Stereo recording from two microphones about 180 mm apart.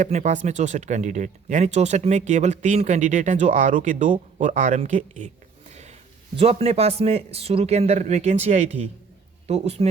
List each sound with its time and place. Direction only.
0.0 s speech: 40° right (ahead or behind)